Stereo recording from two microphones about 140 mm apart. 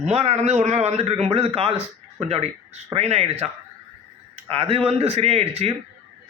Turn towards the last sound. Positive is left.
turn(degrees=-50)  # may be behind; listen again after turning